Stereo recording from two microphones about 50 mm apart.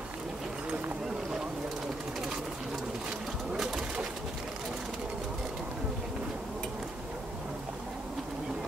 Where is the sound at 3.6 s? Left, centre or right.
Centre.